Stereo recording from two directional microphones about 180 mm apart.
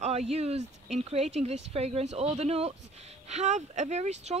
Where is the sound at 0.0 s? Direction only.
35° right (ahead or behind).